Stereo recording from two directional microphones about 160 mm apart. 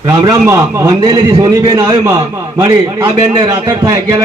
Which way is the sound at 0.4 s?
20° right (ahead or behind).